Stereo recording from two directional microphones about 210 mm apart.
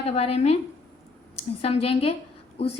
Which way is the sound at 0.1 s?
30° left (ahead or behind).